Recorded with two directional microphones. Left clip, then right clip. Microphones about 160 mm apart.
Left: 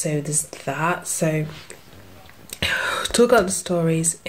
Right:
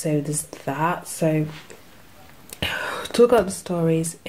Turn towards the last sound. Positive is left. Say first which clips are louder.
# even
turn(degrees=0)  # may be behind; listen again after turning